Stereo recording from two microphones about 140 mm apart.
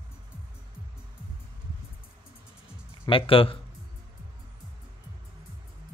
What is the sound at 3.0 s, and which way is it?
Speech, 40° left (ahead or behind).